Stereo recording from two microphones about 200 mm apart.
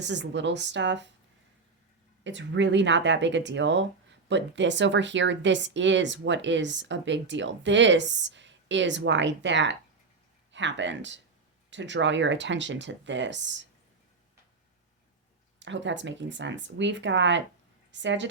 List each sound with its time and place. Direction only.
0.0 s speech: 60° right (ahead or behind)
2.2 s speech: 65° right (ahead or behind)
15.5 s speech: 65° right (ahead or behind)